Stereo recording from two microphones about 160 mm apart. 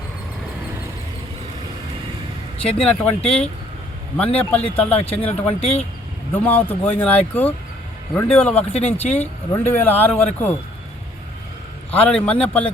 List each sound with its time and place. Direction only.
2.6 s speech: 5° left (ahead or behind)
5.5 s speech: 40° left (ahead or behind)
6.3 s speech: 10° left (ahead or behind)
8.7 s speech: 40° left (ahead or behind)
9.0 s speech: 10° left (ahead or behind)
11.9 s speech: 10° left (ahead or behind)